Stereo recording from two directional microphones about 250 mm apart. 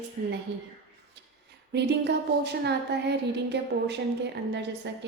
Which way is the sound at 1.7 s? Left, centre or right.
Right.